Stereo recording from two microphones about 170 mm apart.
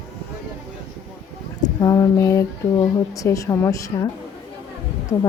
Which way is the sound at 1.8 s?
20° left (ahead or behind).